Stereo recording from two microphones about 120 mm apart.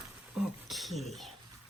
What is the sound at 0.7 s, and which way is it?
Beatboxing, centre (ahead or behind).